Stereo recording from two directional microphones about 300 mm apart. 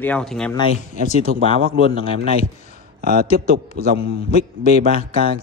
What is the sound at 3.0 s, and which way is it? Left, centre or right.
Speech, right.